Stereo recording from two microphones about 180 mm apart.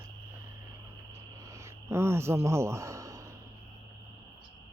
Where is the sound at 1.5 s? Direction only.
15° right (ahead or behind).